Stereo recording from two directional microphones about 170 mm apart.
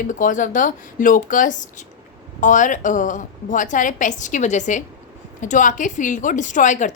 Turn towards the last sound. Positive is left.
turn(degrees=45)  # may be behind; listen again after turning